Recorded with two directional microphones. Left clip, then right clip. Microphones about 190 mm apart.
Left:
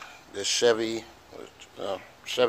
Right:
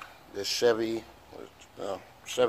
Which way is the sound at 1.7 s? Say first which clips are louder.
Left 3 dB; 15° left (ahead or behind).